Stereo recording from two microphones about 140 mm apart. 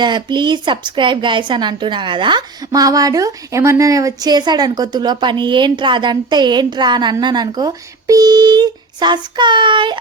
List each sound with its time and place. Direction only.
0.0 s a woman's voice: 35° right (ahead or behind)